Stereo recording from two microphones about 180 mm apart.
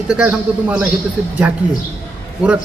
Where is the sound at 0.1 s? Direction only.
5° right (ahead or behind).